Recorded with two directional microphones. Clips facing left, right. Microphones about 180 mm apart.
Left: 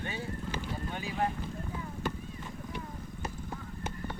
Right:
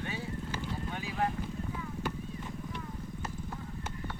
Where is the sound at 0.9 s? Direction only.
Centre (ahead or behind).